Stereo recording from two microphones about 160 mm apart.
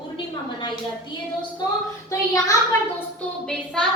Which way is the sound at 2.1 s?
20° left (ahead or behind).